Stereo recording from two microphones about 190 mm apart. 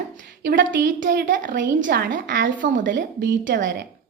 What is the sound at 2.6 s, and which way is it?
Speech, 45° right (ahead or behind).